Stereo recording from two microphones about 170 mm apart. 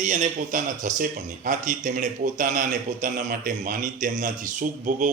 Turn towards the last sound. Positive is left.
turn(degrees=-50)  # may be behind; listen again after turning